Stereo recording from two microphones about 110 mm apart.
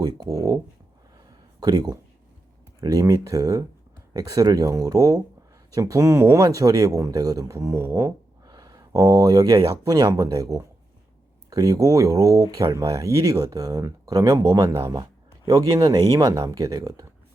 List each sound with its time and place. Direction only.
0.0 s speech: 35° right (ahead or behind)
1.6 s speech: 35° right (ahead or behind)